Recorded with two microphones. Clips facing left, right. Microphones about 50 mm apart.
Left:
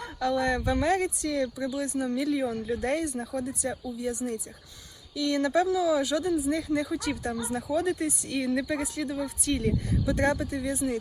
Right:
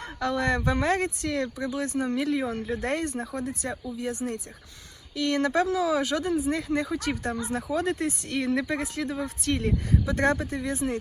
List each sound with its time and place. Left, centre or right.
0.0 s speech: right
6.8 s speech: right
7.2 s speech: right